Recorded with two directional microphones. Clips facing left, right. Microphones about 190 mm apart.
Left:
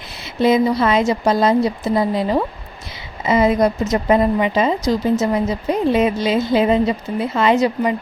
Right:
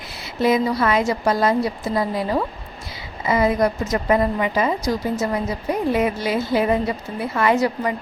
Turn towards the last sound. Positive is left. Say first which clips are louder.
# left 3 dB
turn(degrees=20)  # may be behind; listen again after turning